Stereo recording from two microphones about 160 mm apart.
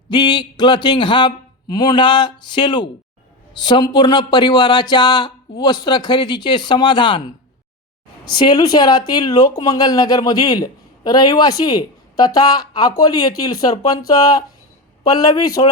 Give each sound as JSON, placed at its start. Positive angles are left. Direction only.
{"t": 0.1, "sound": "speech", "side_deg": 30}
{"t": 8.2, "sound": "speech", "side_deg": 25}